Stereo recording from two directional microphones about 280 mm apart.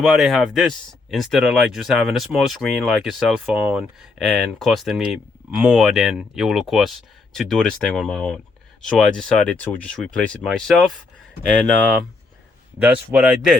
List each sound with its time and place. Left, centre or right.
0.0 s speech: centre
12.8 s speech: centre